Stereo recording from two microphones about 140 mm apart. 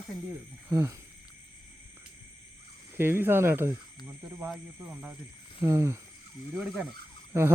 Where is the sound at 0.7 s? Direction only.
20° right (ahead or behind).